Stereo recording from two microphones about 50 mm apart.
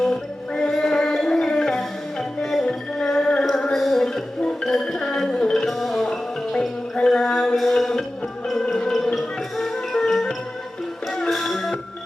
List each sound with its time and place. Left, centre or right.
0.5 s music: centre
5.6 s music: centre
11.3 s music: centre